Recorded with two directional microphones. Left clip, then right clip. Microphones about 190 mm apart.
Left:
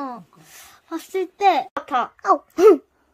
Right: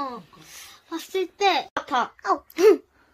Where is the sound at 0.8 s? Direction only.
55° left (ahead or behind).